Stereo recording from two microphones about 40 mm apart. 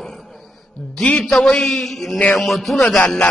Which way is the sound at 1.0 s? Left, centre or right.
Left.